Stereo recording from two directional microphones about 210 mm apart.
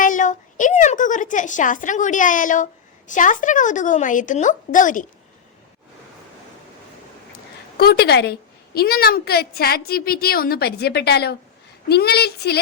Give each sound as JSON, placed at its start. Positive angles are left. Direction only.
{"t": 0.0, "sound": "a sound", "side_deg": 35}
{"t": 0.6, "sound": "a woman's voice", "side_deg": 35}
{"t": 7.8, "sound": "a woman's voice", "side_deg": 50}